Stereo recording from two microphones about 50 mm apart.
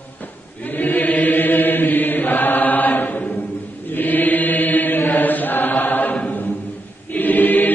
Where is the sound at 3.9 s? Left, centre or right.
Left.